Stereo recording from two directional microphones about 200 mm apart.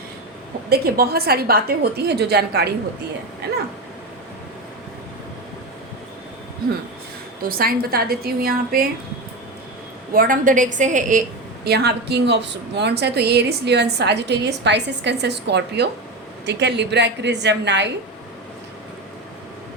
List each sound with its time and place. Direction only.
0.7 s a woman's voice: 50° right (ahead or behind)
7.4 s a woman's voice: 45° right (ahead or behind)
10.2 s a woman's voice: 40° right (ahead or behind)
11.6 s a woman's voice: 55° right (ahead or behind)